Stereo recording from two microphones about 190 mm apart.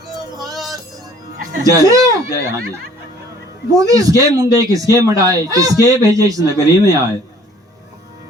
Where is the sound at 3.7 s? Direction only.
20° right (ahead or behind).